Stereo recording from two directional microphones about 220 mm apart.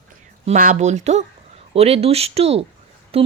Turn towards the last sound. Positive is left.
turn(degrees=-25)  # may be behind; listen again after turning